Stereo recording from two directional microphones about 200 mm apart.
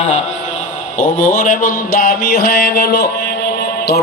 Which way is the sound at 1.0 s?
40° left (ahead or behind).